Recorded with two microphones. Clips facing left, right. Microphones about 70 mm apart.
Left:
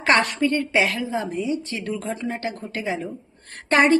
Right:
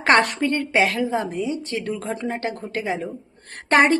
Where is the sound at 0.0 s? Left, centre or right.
Right.